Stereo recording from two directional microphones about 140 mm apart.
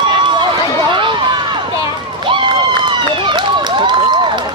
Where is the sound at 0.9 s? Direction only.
35° right (ahead or behind).